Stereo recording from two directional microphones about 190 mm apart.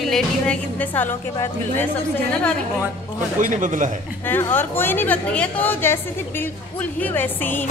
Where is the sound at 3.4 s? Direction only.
45° right (ahead or behind).